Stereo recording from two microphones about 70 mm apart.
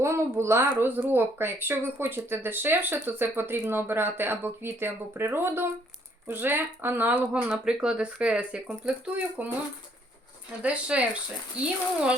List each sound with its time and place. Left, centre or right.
0.0 s a woman's voice: right
10.6 s speech: centre